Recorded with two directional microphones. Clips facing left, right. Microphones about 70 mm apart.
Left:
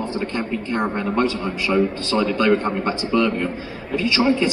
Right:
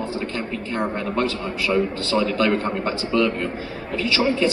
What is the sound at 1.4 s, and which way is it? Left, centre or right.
A man's voice, centre.